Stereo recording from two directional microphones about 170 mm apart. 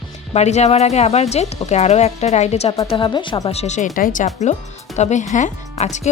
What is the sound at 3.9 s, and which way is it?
A woman's voice, 50° left (ahead or behind).